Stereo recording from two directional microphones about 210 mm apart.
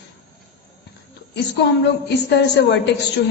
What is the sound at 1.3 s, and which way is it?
A woman's voice, 55° left (ahead or behind).